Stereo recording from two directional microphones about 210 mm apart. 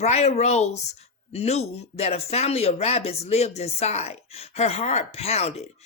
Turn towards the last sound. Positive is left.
turn(degrees=30)  # may be behind; listen again after turning